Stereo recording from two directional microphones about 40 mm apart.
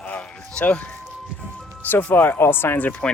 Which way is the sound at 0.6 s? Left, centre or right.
Left.